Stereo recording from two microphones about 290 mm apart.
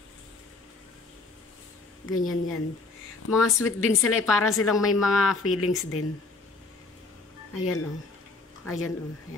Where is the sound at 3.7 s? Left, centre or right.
Left.